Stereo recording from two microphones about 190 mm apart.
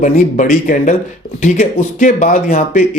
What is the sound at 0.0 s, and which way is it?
Speech, 40° left (ahead or behind).